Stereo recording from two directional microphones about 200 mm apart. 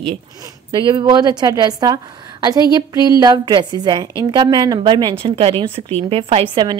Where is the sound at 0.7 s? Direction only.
25° right (ahead or behind).